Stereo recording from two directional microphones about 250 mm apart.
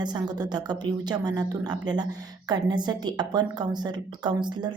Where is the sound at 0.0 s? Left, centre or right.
Centre.